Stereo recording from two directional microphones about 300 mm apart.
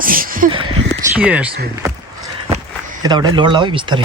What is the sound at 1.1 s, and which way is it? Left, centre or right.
Speech, centre.